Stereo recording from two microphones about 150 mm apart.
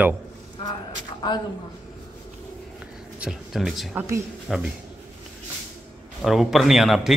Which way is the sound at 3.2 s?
Centre (ahead or behind).